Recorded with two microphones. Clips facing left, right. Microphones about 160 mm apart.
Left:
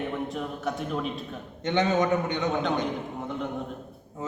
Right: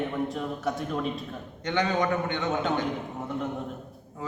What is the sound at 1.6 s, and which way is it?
Speech, 20° left (ahead or behind).